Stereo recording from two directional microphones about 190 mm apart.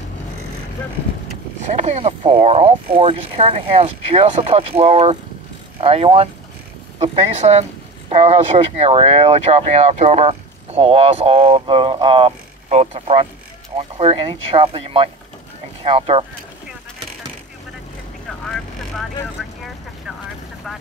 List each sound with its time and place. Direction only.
1.6 s speech: 40° right (ahead or behind)
18.4 s vehicle: centre (ahead or behind)